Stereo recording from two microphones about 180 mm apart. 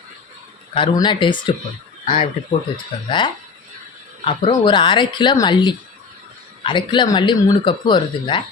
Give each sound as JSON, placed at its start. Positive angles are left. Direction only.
{"t": 0.7, "sound": "speech", "side_deg": 25}